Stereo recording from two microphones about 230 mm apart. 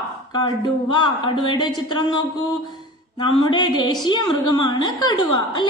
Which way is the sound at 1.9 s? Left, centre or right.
Centre.